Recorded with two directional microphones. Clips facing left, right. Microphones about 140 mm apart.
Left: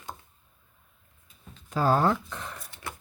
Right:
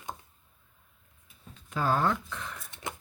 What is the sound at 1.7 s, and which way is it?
Speech, 35° left (ahead or behind).